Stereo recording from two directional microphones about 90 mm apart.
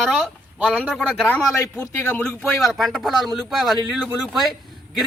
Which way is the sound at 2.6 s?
Centre (ahead or behind).